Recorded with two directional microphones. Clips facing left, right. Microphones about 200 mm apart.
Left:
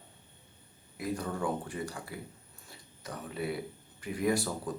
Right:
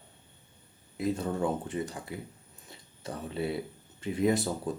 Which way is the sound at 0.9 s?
25° right (ahead or behind).